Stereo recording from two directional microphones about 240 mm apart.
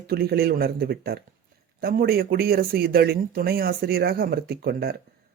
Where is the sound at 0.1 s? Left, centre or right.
Right.